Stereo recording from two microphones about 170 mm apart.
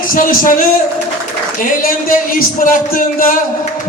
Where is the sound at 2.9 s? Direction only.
55° left (ahead or behind).